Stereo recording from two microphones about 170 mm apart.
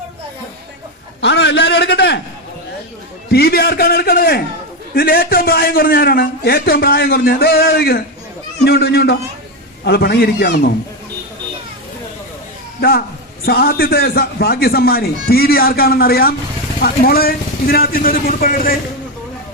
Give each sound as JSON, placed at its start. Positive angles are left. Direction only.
{"t": 1.2, "sound": "a man's voice", "side_deg": 90}
{"t": 3.3, "sound": "a man's voice", "side_deg": 65}
{"t": 13.4, "sound": "a man's voice", "side_deg": 65}